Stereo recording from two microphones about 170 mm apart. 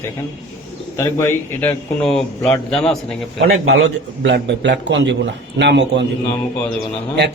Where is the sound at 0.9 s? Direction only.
15° left (ahead or behind).